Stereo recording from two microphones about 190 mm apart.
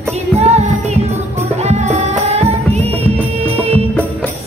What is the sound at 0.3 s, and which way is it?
Music, 35° right (ahead or behind).